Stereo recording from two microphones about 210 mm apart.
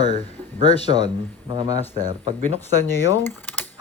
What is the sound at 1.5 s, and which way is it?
Speech, 20° right (ahead or behind).